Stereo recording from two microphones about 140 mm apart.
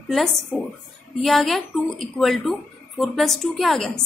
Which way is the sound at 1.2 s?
Centre (ahead or behind).